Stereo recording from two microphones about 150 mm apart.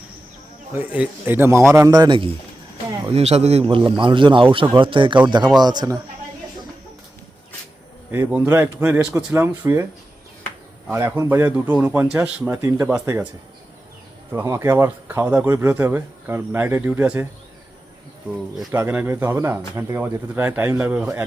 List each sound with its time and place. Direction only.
0.7 s a man's voice: 10° right (ahead or behind); by 2.3 s 35° right (ahead or behind)
3.1 s a man's voice: 45° right (ahead or behind); by 6.0 s 25° right (ahead or behind)
8.1 s speech: 10° right (ahead or behind)
10.9 s speech: 15° right (ahead or behind)
14.3 s speech: 20° right (ahead or behind)
18.7 s speech: 10° right (ahead or behind)